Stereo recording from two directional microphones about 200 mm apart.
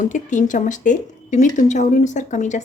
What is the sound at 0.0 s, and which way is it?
Speech, 40° left (ahead or behind).